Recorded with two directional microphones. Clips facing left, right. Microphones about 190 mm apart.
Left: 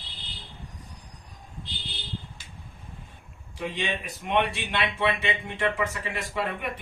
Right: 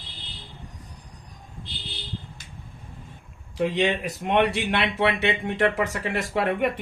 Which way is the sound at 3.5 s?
65° right (ahead or behind).